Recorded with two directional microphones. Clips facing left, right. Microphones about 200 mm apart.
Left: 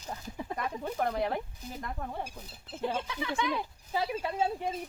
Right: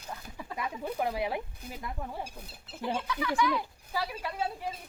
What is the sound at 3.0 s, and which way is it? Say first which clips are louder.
Speech: right 3 dB; 25° left (ahead or behind).